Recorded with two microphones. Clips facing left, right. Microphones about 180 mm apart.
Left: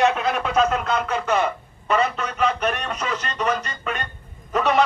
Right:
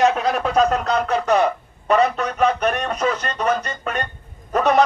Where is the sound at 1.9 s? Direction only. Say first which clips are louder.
Right 4 dB; 40° right (ahead or behind).